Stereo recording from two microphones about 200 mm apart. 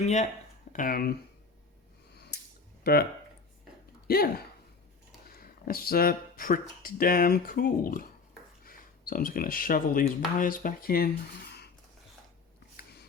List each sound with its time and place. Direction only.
0.0 s speech: 35° left (ahead or behind)
2.1 s a sound: 55° left (ahead or behind)
2.8 s speech: 50° left (ahead or behind)
5.3 s speech: 45° left (ahead or behind)